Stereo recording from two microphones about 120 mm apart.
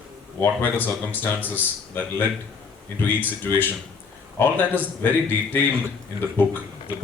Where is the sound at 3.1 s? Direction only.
15° left (ahead or behind).